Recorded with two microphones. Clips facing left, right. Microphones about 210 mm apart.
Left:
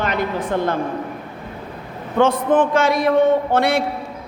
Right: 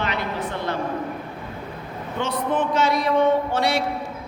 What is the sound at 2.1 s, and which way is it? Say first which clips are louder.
A man's voice: left 8 dB; 50° left (ahead or behind).